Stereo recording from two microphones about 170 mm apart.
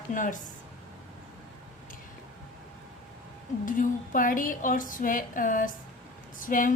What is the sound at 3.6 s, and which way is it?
Speech, 50° left (ahead or behind).